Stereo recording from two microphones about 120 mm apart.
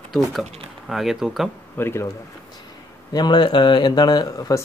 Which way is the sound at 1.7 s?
20° left (ahead or behind).